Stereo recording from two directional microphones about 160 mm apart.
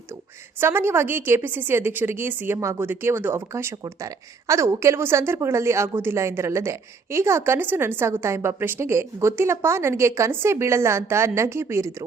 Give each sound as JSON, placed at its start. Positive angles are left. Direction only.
{"t": 0.6, "sound": "a woman's voice", "side_deg": -15}